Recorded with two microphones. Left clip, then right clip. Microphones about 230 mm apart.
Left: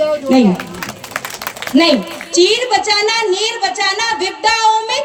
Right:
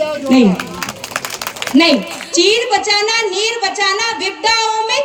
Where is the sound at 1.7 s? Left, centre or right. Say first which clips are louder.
Even; left.